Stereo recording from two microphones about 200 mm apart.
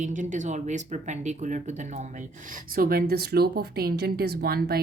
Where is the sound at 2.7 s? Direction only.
45° right (ahead or behind).